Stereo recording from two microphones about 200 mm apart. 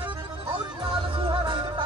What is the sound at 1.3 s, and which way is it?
Music, 25° right (ahead or behind).